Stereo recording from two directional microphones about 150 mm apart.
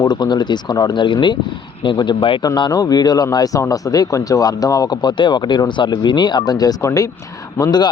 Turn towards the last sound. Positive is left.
turn(degrees=25)  # may be behind; listen again after turning